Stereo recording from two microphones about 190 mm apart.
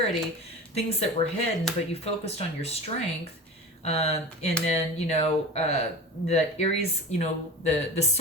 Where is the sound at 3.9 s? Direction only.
35° left (ahead or behind).